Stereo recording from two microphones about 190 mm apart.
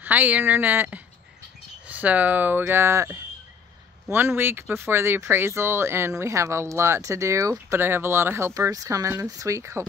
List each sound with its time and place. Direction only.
0.0 s speech: 10° right (ahead or behind)